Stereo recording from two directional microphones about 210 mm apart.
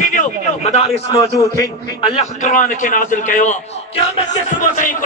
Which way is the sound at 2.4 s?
40° left (ahead or behind).